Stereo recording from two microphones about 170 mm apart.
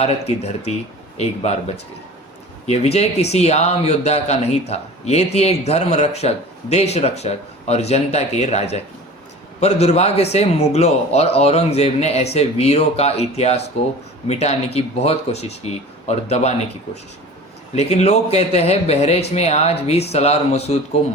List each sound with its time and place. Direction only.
0.0 s a man's voice: 40° left (ahead or behind)
17.7 s a man's voice: 40° left (ahead or behind)